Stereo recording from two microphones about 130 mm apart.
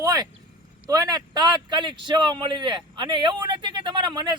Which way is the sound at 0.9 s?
30° right (ahead or behind).